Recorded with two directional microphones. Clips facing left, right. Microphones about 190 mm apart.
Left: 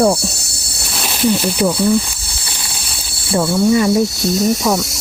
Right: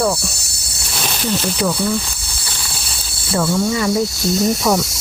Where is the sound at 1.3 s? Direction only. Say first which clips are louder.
Left 1 dB; 15° left (ahead or behind).